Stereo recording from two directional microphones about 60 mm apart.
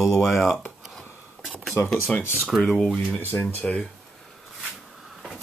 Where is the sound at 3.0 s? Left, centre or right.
Left.